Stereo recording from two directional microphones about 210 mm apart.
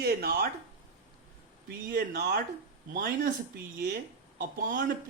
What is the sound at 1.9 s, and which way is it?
Speech, 50° right (ahead or behind).